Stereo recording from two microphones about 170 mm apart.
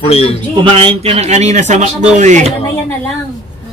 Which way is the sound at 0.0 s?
35° left (ahead or behind).